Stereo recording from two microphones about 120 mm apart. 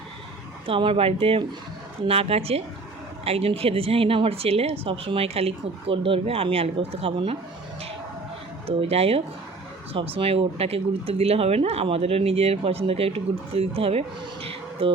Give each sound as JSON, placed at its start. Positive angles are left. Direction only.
{"t": 0.7, "sound": "a woman's voice", "side_deg": -50}
{"t": 8.6, "sound": "speech", "side_deg": -55}
{"t": 14.4, "sound": "insect", "side_deg": -50}